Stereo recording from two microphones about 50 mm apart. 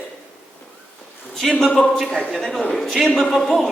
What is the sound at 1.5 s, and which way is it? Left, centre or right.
A man's voice, centre.